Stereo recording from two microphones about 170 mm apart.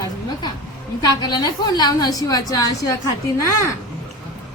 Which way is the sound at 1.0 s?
25° left (ahead or behind).